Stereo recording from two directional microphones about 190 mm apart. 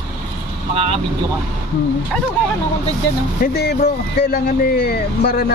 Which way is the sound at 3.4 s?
55° left (ahead or behind).